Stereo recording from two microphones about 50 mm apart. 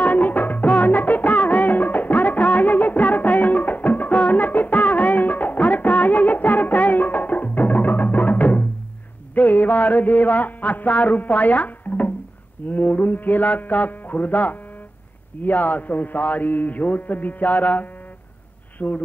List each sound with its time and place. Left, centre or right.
0.0 s music: left
12.6 s a man's voice: left